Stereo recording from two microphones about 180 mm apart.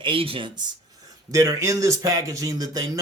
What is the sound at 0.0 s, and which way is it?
Speech, 30° right (ahead or behind).